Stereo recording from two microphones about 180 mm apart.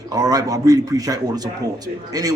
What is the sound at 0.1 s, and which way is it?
A man's voice, 20° right (ahead or behind).